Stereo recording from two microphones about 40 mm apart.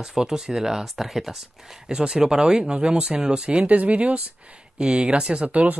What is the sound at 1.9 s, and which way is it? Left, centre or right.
Speech, centre.